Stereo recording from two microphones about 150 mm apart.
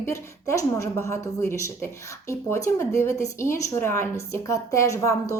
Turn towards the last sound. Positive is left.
turn(degrees=20)  # may be behind; listen again after turning